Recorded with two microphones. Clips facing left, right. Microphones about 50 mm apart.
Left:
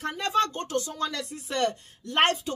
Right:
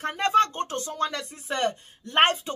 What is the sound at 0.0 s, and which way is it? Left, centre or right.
Speech, right.